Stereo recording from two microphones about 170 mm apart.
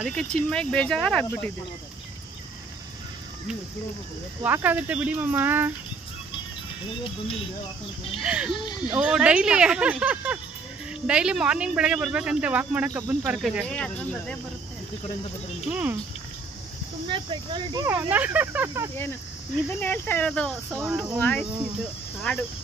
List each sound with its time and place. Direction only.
0.0 s speech: 5° left (ahead or behind)
4.4 s speech: 10° right (ahead or behind)
8.2 s speech: 5° right (ahead or behind)
8.5 s speech: 25° left (ahead or behind)
8.9 s speech: 5° right (ahead or behind)
13.7 s speech: 5° left (ahead or behind)
15.6 s speech: 5° right (ahead or behind)
17.1 s speech: 30° right (ahead or behind)
17.8 s speech: 15° right (ahead or behind)
19.8 s speech: 10° left (ahead or behind)